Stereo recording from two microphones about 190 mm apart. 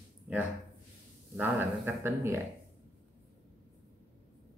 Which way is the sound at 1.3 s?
10° right (ahead or behind).